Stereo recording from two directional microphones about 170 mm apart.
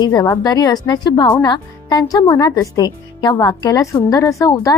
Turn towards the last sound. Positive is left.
turn(degrees=20)  # may be behind; listen again after turning